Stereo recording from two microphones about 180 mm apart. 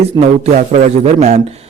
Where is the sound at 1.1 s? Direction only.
40° right (ahead or behind).